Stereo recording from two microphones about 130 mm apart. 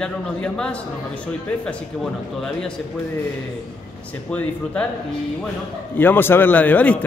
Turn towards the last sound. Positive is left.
turn(degrees=10)  # may be behind; listen again after turning